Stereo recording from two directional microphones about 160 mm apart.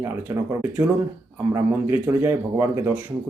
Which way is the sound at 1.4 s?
15° right (ahead or behind).